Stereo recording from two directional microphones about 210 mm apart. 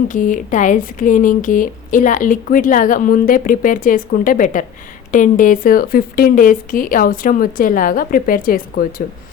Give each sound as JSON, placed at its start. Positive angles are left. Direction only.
{"t": 0.1, "sound": "speech", "side_deg": 40}